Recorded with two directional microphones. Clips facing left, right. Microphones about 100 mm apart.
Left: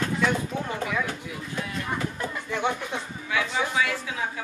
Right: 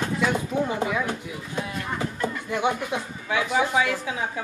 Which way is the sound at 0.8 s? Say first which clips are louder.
Right 3 dB; 20° right (ahead or behind).